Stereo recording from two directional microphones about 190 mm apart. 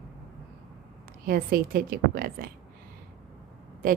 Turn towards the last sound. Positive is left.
turn(degrees=-50)  # may be behind; listen again after turning